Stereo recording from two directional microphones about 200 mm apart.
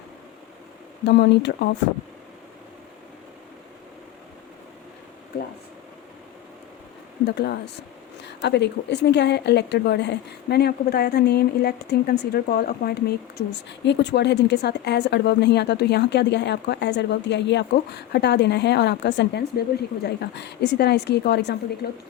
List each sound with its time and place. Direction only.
1.0 s speech: 60° left (ahead or behind)
7.3 s speech: 55° left (ahead or behind)